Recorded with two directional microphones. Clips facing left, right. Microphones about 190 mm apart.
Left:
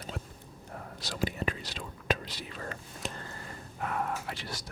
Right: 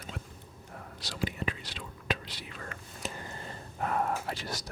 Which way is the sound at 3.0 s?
5° right (ahead or behind).